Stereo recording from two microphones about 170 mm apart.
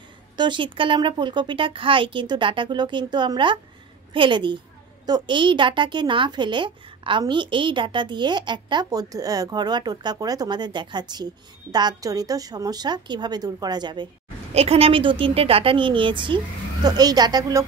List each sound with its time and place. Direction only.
0.4 s a woman's voice: 30° right (ahead or behind)
14.5 s a woman's voice: 35° right (ahead or behind); by 17.6 s 20° right (ahead or behind)